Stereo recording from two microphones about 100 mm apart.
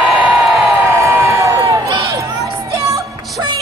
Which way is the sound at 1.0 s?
30° right (ahead or behind).